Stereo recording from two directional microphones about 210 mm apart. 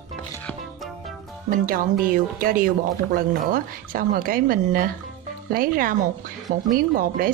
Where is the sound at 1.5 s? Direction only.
40° right (ahead or behind).